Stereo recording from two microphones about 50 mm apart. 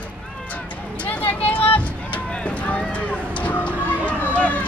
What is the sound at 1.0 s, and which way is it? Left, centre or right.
Vehicle, left.